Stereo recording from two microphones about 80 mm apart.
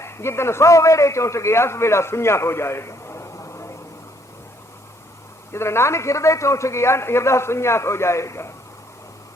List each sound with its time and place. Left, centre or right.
0.0 s a man's voice: left
5.5 s a man's voice: left